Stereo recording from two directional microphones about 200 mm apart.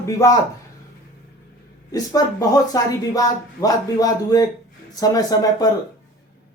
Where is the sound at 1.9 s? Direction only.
15° left (ahead or behind).